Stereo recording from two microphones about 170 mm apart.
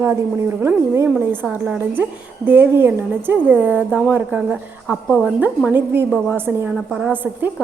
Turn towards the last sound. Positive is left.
turn(degrees=-10)  # may be behind; listen again after turning